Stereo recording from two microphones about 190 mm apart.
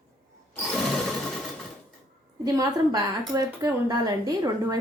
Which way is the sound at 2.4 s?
20° right (ahead or behind).